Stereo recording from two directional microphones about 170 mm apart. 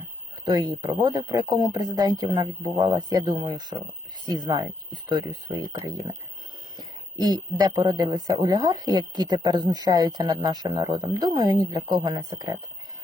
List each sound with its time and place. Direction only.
0.4 s speech: 20° right (ahead or behind)